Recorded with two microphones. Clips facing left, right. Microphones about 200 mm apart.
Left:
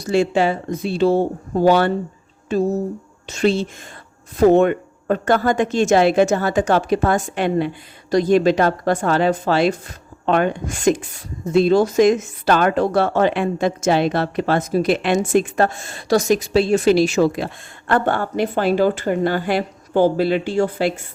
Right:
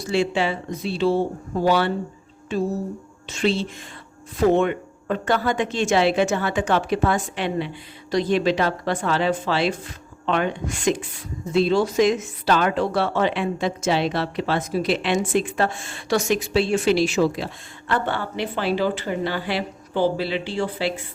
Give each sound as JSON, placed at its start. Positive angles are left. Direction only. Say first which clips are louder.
{"t": 0.0, "sound": "speech", "louder": "left 5 dB", "side_deg": 45}